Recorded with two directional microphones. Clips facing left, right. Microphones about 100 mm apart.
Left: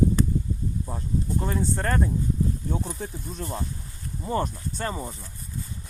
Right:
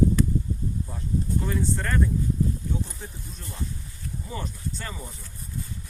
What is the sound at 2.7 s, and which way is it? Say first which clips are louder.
Speech: left 3 dB; 60° left (ahead or behind).